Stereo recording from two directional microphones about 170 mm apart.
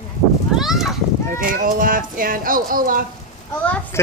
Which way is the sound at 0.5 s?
Centre (ahead or behind).